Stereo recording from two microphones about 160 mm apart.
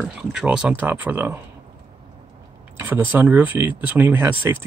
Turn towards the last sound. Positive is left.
turn(degrees=-15)  # may be behind; listen again after turning